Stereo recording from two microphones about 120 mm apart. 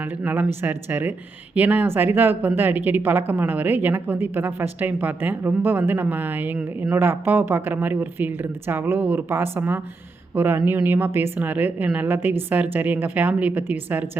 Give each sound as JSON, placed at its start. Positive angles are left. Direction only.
{"t": 0.0, "sound": "a woman's voice", "side_deg": -15}